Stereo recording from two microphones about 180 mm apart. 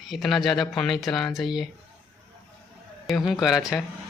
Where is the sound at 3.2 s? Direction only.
20° left (ahead or behind).